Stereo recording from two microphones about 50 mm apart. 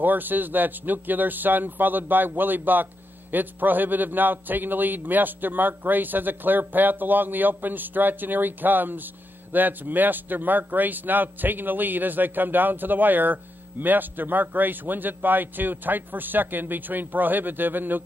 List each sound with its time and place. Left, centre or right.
0.0 s speech: right